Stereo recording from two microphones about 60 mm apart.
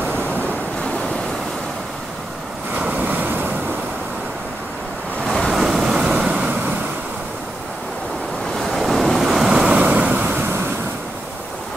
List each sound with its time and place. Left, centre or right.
2.8 s waves: right
5.2 s waves: centre
5.6 s waves: centre
5.9 s vehicle: centre
8.5 s waves: centre; by 10.6 s right